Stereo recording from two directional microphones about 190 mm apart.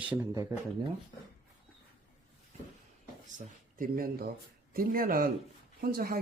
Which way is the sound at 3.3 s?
45° right (ahead or behind).